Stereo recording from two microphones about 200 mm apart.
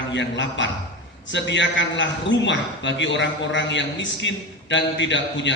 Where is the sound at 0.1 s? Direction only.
65° left (ahead or behind).